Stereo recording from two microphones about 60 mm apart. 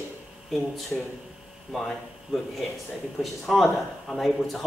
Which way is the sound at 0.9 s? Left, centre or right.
Centre.